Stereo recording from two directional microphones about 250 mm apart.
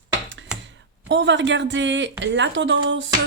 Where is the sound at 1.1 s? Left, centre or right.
Right.